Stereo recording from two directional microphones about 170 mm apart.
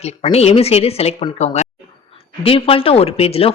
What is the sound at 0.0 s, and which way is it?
A man's voice, 35° left (ahead or behind).